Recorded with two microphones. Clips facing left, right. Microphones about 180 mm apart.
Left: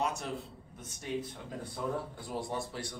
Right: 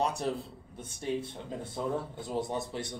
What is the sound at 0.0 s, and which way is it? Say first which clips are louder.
A man's voice: right 4 dB; 35° right (ahead or behind).